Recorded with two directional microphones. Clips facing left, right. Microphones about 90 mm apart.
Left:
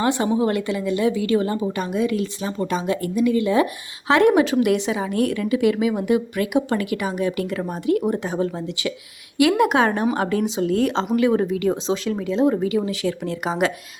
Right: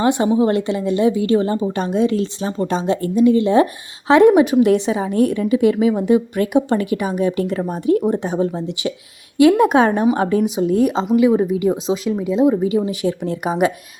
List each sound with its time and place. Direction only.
0.0 s a woman's voice: 25° right (ahead or behind)
10.9 s speech: 5° right (ahead or behind)
12.7 s a woman's voice: 25° right (ahead or behind)